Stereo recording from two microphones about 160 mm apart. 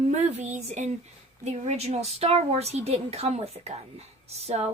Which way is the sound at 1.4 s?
40° right (ahead or behind).